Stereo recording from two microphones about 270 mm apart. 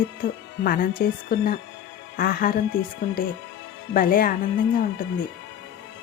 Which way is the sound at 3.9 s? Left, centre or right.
Left.